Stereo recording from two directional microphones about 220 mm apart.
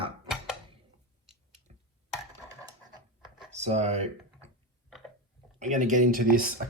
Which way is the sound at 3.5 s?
30° right (ahead or behind).